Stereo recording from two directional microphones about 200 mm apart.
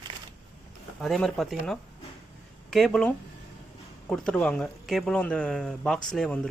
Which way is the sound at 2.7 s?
Centre (ahead or behind).